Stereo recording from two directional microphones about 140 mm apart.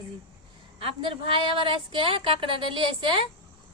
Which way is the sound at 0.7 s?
40° right (ahead or behind).